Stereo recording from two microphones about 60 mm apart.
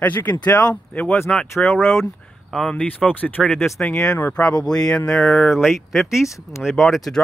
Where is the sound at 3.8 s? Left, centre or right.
Centre.